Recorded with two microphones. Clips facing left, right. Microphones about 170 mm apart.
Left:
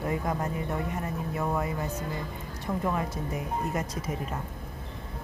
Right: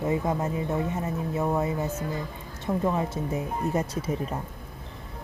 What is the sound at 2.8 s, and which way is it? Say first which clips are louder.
Speech: right 3 dB; 25° right (ahead or behind).